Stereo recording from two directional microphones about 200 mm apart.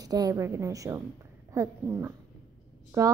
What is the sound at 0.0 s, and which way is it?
A woman's voice, 20° right (ahead or behind).